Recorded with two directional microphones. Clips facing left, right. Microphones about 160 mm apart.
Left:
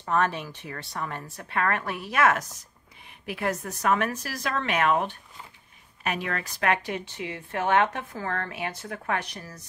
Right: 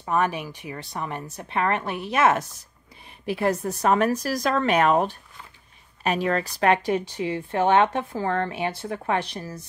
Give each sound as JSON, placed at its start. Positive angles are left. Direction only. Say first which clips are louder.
{"t": 0.0, "sound": "a woman's voice", "louder": "right 2 dB", "side_deg": -15}